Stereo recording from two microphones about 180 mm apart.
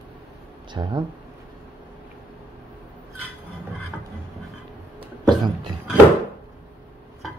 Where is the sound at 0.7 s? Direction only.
25° right (ahead or behind).